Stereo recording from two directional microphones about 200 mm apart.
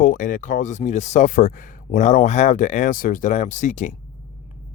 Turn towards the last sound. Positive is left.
turn(degrees=40)  # may be behind; listen again after turning